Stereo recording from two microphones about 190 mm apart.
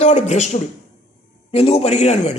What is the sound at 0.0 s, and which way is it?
A man's voice, 35° left (ahead or behind).